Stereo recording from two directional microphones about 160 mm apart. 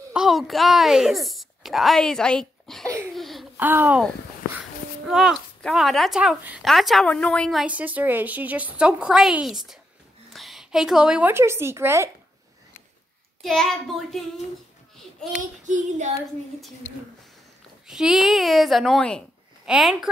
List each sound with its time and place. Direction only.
0.1 s speech: centre (ahead or behind)
3.2 s a sound: centre (ahead or behind)
3.5 s speech: 10° right (ahead or behind); by 7.6 s 5° left (ahead or behind)
7.6 s a woman's voice: 10° right (ahead or behind)
13.4 s a child's voice: centre (ahead or behind)
15.6 s child singing: 50° right (ahead or behind)
17.8 s a child's voice: 5° right (ahead or behind)